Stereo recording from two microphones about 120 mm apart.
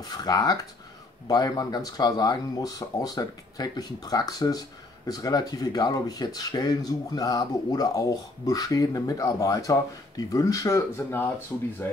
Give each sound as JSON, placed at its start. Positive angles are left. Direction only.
{"t": 0.0, "sound": "speech", "side_deg": 35}